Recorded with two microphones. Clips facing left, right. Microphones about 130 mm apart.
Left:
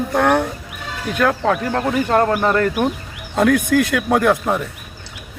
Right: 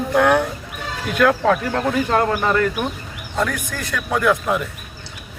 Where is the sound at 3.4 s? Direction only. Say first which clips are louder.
Left 9 dB; 80° left; by 4.3 s 50° left (ahead or behind).